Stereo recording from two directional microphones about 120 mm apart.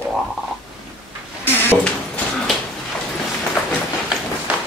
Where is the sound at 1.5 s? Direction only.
20° left (ahead or behind).